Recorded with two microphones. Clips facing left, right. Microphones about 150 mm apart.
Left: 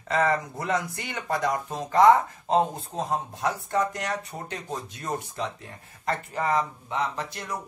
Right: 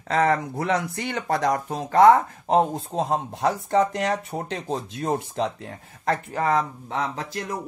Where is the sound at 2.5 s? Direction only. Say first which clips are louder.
Right 3 dB; 85° right.